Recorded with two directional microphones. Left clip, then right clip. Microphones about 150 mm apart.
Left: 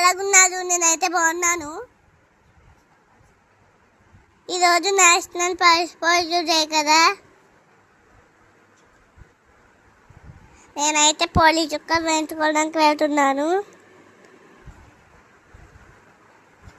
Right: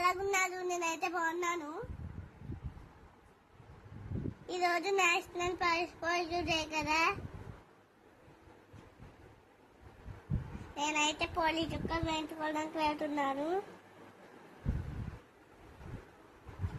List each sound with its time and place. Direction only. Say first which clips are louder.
0.0 s a child's voice: left 15 dB; 75° left (ahead or behind); by 1.8 s 90° left
4.4 s a child's voice: left 15 dB; 70° left (ahead or behind)
10.8 s a woman's voice: left 14 dB; 75° left (ahead or behind); by 13.6 s 90° left